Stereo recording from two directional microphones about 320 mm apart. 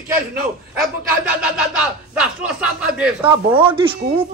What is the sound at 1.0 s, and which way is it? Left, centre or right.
Speech, centre.